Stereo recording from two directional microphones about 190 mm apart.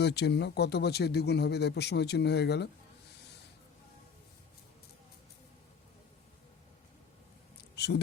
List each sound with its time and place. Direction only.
0.0 s speech: 60° left (ahead or behind)
7.8 s speech: 60° left (ahead or behind)